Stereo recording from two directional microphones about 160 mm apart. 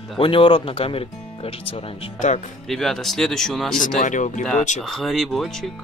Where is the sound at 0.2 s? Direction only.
35° left (ahead or behind).